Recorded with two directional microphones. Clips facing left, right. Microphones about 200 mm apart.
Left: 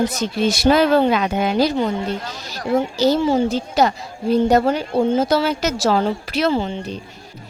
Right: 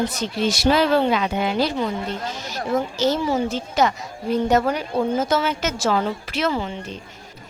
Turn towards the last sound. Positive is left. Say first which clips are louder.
# left 4 dB
turn(degrees=30)  # may be behind; listen again after turning